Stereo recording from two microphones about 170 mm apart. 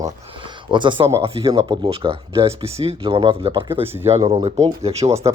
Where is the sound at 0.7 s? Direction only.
30° right (ahead or behind).